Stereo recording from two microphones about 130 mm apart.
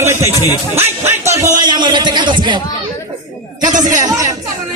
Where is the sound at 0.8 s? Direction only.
20° right (ahead or behind); by 2.5 s 35° right (ahead or behind).